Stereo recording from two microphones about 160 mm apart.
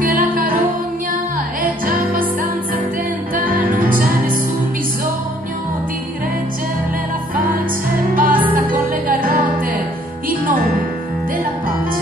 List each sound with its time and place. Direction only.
0.0 s music: 65° right (ahead or behind)
3.3 s music: 60° right (ahead or behind)
8.1 s music: 60° right (ahead or behind)